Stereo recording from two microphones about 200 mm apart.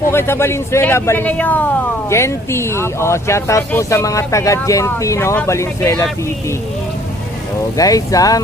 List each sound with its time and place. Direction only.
0.1 s a man's voice: 10° left (ahead or behind)
7.8 s a man's voice: 15° left (ahead or behind)